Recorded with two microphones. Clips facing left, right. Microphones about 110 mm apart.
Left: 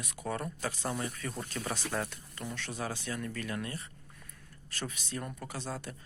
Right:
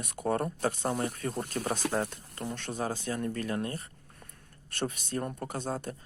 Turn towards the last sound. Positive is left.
turn(degrees=-45)  # may be behind; listen again after turning